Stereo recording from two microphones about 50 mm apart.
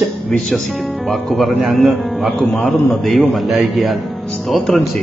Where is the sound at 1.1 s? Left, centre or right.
Centre.